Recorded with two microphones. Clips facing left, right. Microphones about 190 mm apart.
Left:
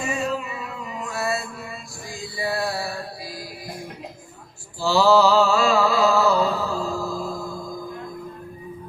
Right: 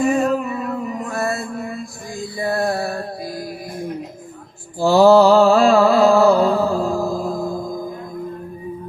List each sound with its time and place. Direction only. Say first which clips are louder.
0.0 s music: right 9 dB; 55° right (ahead or behind)
4.8 s mantra: right 6 dB; 50° right (ahead or behind)